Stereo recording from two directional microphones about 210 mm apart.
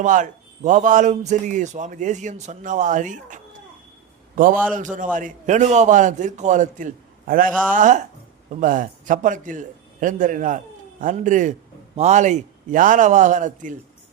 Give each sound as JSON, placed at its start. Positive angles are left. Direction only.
{"t": 0.0, "sound": "a man's voice", "side_deg": -35}